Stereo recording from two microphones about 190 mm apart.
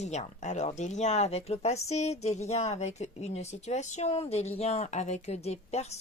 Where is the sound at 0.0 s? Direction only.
35° left (ahead or behind).